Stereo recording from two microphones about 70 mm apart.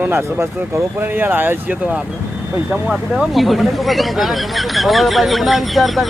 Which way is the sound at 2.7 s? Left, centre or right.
Centre.